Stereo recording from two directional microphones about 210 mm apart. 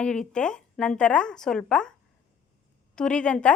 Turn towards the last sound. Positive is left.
turn(degrees=5)  # may be behind; listen again after turning